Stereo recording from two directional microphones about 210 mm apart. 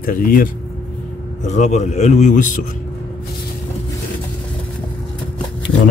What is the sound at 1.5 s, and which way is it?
A man's voice, 35° left (ahead or behind).